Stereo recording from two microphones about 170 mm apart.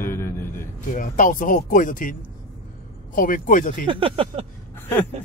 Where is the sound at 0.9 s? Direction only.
50° left (ahead or behind).